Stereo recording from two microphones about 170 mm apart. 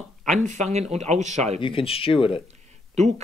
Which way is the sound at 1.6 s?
30° left (ahead or behind).